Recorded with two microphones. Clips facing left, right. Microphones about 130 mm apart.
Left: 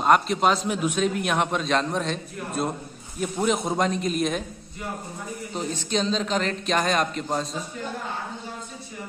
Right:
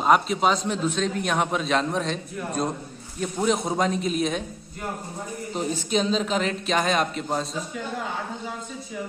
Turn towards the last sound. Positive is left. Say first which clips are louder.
# even
turn(degrees=0)  # may be behind; listen again after turning